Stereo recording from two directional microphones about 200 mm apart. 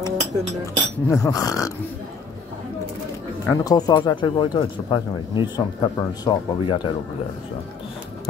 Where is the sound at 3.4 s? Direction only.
20° left (ahead or behind).